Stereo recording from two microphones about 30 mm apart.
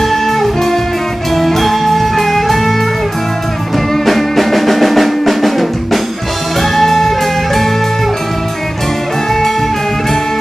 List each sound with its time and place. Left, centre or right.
0.0 s music: centre
3.9 s music: centre